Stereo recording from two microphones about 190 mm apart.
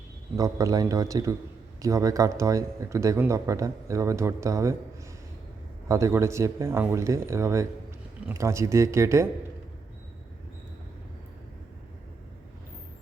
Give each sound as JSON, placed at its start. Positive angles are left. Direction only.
{"t": 0.3, "sound": "speech", "side_deg": -20}
{"t": 5.9, "sound": "speech", "side_deg": -15}